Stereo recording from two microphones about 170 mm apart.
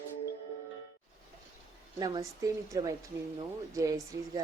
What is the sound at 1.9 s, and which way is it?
A woman's voice, 20° right (ahead or behind).